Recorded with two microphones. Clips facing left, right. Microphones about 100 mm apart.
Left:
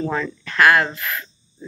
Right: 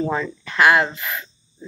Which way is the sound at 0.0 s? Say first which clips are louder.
Right 1 dB; 20° right (ahead or behind).